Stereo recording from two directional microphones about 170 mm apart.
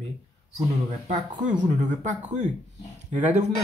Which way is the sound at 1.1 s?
45° right (ahead or behind).